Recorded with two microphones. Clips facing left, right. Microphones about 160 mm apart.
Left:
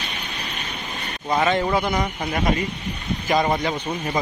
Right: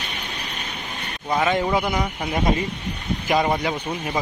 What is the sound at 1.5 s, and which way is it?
Speech, 10° right (ahead or behind).